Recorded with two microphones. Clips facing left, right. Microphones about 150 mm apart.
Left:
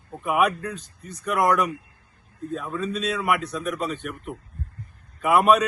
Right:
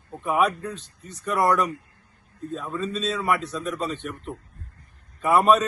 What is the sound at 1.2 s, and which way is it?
Speech, 15° left (ahead or behind).